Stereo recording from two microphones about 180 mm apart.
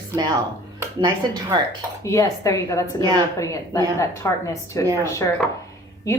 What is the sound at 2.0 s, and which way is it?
A woman's voice, 15° left (ahead or behind).